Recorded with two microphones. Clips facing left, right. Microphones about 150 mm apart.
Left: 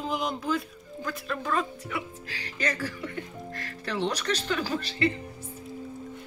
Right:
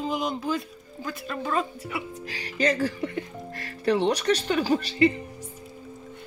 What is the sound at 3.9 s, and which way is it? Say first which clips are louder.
Speech: right 7 dB; 20° right (ahead or behind).